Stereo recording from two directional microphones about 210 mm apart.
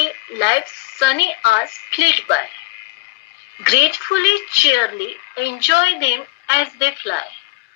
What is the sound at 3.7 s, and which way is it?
A woman's voice, 55° left (ahead or behind).